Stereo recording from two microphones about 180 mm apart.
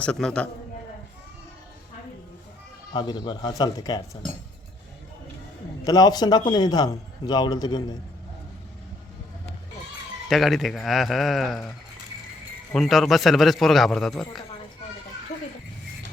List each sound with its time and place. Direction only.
0.0 s a man's voice: 5° left (ahead or behind)
2.9 s a man's voice: 25° left (ahead or behind)
5.8 s a man's voice: 20° left (ahead or behind)
10.2 s a man's voice: centre (ahead or behind)
12.7 s a man's voice: centre (ahead or behind)